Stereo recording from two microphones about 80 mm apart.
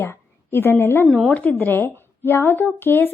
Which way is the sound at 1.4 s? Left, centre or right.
Left.